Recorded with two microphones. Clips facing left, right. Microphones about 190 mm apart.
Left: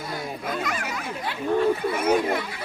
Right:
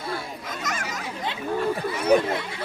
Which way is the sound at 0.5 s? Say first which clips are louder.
Left 1 dB; 45° right (ahead or behind).